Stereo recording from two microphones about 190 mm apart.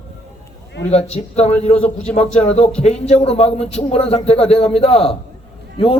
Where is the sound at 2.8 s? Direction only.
35° left (ahead or behind).